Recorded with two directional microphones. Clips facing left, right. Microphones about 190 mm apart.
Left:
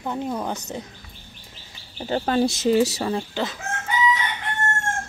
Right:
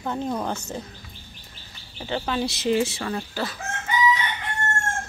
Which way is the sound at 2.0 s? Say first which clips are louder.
Left 5 dB; 40° left (ahead or behind).